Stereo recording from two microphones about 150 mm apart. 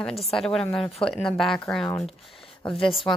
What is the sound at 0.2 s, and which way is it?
Speech, centre (ahead or behind).